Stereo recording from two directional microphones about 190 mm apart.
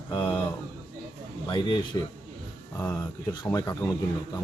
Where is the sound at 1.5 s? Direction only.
25° left (ahead or behind).